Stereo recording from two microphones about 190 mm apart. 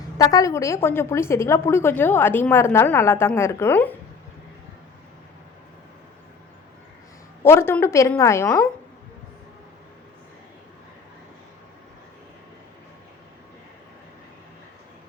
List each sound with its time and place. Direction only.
0.2 s a woman's voice: 20° left (ahead or behind)
7.4 s a woman's voice: 15° left (ahead or behind)